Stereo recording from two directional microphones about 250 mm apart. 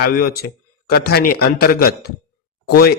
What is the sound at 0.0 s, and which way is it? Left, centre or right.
Speech, left.